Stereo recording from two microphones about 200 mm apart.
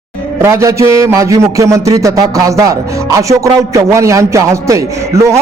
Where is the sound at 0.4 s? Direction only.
15° right (ahead or behind).